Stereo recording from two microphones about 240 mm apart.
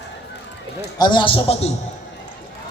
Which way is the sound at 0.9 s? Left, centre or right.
Centre.